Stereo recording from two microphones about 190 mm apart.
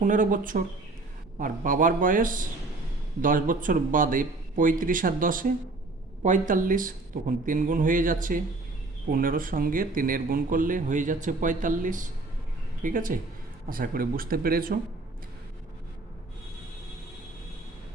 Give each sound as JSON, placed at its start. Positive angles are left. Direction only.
{"t": 0.0, "sound": "speech", "side_deg": -45}